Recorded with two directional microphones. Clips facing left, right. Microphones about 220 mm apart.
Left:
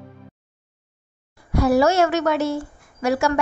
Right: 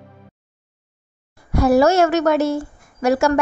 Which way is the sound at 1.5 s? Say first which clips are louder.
Right 3 dB; 45° right (ahead or behind).